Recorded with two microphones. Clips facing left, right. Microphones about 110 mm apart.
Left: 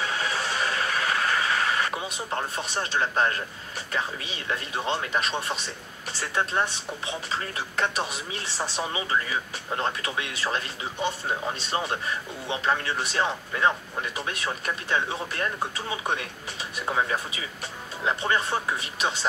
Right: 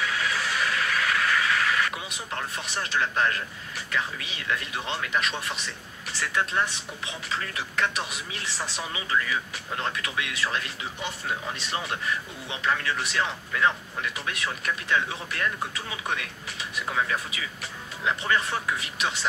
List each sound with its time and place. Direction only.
0.0 s vehicle: 30° left (ahead or behind)
6.2 s speech: 30° left (ahead or behind)